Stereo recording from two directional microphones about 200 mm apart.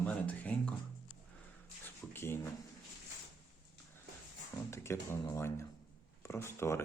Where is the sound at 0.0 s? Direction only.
5° left (ahead or behind).